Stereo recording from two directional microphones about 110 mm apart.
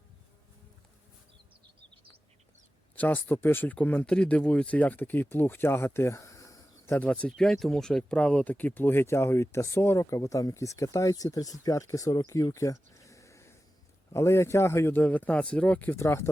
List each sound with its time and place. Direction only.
2.9 s speech: 15° left (ahead or behind)
6.9 s speech: 10° left (ahead or behind)